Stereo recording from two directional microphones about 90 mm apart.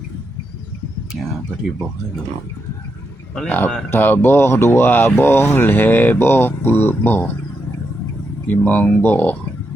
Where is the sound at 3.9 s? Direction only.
25° left (ahead or behind).